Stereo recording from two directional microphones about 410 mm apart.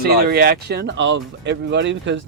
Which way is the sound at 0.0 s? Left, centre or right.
Right.